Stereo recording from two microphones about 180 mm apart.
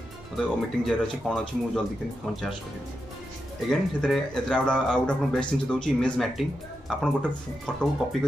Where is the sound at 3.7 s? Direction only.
5° left (ahead or behind).